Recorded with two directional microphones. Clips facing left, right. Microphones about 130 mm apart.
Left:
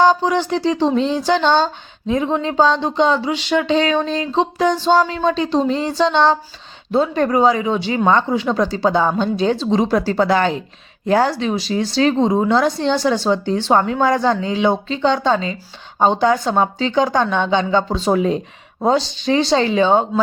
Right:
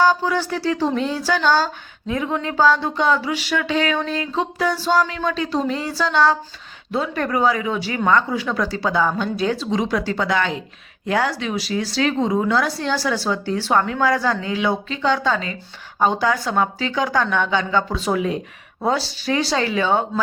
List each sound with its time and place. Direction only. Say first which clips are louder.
0.0 s speech: left 3 dB; 25° left (ahead or behind)